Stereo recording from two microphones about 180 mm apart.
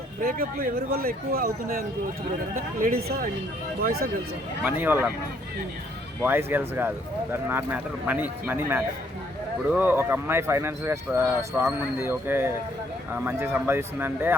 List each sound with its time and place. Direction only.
0.2 s speech: 55° right (ahead or behind)
4.6 s speech: 10° right (ahead or behind)
6.2 s speech: 10° right (ahead or behind)